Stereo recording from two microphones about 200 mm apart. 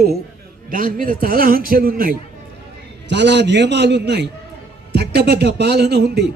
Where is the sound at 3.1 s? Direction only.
60° right (ahead or behind).